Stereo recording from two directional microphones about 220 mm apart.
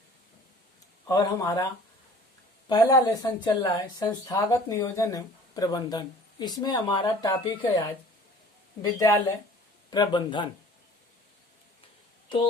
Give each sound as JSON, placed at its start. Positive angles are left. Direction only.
{"t": 1.0, "sound": "speech", "side_deg": 15}
{"t": 2.6, "sound": "speech", "side_deg": 15}
{"t": 8.8, "sound": "speech", "side_deg": 15}